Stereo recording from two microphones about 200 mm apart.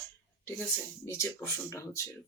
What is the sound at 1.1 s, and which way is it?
Speech, 15° left (ahead or behind).